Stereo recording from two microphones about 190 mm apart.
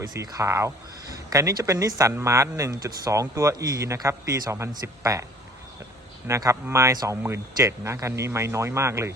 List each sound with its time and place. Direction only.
0.0 s speech: 20° right (ahead or behind)
6.2 s speech: 15° right (ahead or behind)